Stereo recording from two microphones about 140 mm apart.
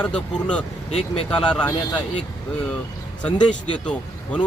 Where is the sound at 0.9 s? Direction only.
50° left (ahead or behind).